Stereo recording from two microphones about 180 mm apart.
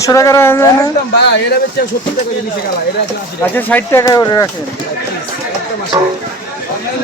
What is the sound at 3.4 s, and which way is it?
Speech, 10° left (ahead or behind).